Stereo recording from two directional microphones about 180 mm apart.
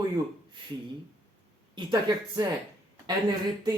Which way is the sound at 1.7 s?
25° right (ahead or behind).